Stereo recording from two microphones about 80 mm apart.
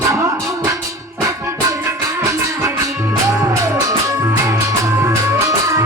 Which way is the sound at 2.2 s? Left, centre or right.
Right.